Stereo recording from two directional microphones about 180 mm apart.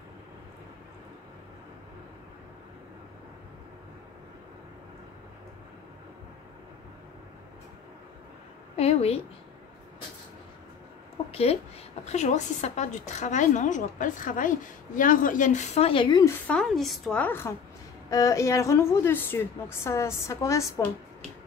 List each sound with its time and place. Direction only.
8.7 s a woman's voice: 35° left (ahead or behind)
12.0 s a woman's voice: 40° left (ahead or behind); by 16.3 s 20° left (ahead or behind)
16.4 s a woman's voice: 5° left (ahead or behind)